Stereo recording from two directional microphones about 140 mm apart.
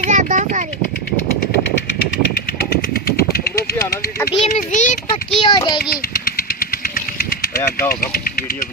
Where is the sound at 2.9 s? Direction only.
90° left.